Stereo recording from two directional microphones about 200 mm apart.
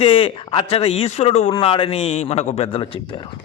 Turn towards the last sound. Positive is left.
turn(degrees=25)  # may be behind; listen again after turning